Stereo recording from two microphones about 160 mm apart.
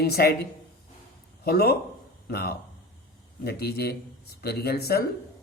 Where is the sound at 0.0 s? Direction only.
85° left.